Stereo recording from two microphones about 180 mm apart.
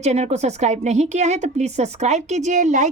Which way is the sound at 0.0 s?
40° right (ahead or behind).